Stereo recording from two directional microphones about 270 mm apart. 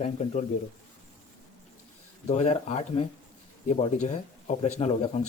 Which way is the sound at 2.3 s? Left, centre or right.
Left.